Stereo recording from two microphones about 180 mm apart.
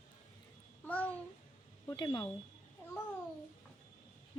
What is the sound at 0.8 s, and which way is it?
Speech, 5° left (ahead or behind).